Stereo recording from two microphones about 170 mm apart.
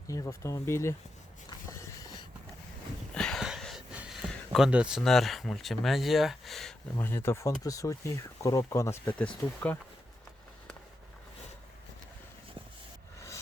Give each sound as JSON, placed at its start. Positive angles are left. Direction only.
{"t": 0.1, "sound": "speech", "side_deg": 15}
{"t": 1.5, "sound": "a sound", "side_deg": 20}
{"t": 3.2, "sound": "speech", "side_deg": 0}
{"t": 6.9, "sound": "speech", "side_deg": 15}